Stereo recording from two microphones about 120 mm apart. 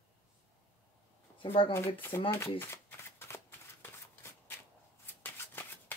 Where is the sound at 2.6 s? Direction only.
20° left (ahead or behind).